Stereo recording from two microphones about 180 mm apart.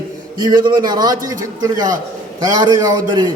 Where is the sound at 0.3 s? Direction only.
25° right (ahead or behind).